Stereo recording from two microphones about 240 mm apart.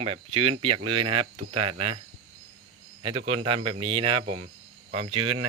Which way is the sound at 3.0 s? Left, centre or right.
Right.